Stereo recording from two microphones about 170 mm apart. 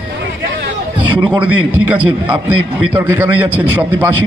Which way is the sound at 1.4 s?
10° right (ahead or behind).